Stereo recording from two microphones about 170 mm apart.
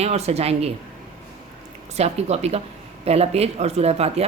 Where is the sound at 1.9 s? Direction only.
40° right (ahead or behind).